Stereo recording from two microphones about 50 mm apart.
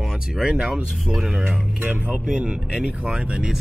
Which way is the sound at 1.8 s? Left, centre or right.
Right.